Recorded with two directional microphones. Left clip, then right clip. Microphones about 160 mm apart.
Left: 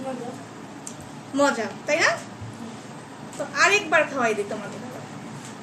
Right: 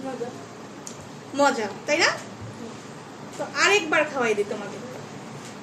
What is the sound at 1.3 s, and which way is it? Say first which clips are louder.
Speech: even; 20° right (ahead or behind).